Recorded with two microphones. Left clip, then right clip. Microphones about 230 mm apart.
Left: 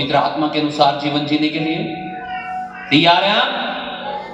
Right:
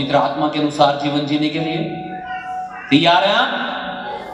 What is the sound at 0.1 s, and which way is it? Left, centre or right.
A man's voice, right.